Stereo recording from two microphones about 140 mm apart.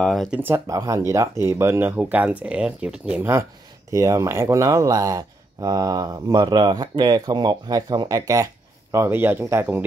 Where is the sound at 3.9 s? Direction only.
25° right (ahead or behind).